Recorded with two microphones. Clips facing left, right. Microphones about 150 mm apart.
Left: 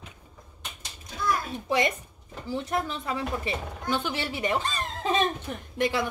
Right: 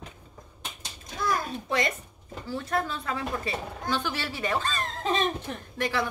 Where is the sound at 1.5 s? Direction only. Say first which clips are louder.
Left 2 dB; 15° left (ahead or behind).